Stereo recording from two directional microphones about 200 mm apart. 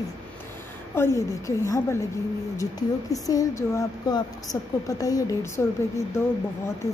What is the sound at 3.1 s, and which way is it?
A woman's voice, 15° left (ahead or behind).